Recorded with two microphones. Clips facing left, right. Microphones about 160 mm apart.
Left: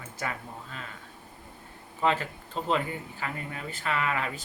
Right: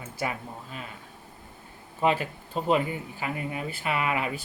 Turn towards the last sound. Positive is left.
turn(degrees=-15)  # may be behind; listen again after turning